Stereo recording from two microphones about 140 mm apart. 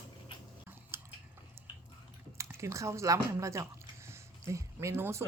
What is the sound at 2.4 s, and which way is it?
Speech, 20° right (ahead or behind).